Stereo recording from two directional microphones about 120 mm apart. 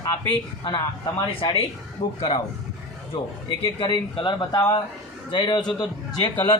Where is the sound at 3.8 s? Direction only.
40° left (ahead or behind).